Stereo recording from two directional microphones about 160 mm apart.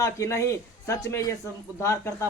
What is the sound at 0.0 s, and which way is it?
Speech, 20° left (ahead or behind).